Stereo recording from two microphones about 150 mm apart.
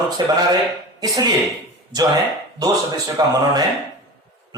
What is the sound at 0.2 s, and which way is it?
A man's voice, 30° right (ahead or behind).